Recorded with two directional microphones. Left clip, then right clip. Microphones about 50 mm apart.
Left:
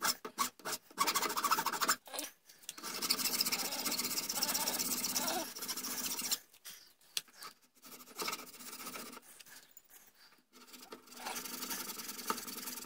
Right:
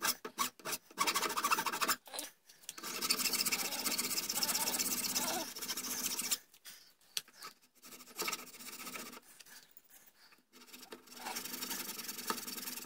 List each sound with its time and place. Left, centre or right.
0.0 s filing: centre
0.6 s scratch: centre
2.7 s rub: centre
7.2 s a sound: centre
7.8 s scratch: centre
10.7 s filing: centre
11.3 s a sound: right
11.7 s engine: centre